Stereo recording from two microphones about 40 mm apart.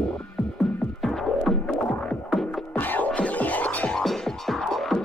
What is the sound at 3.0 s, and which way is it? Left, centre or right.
Music, left.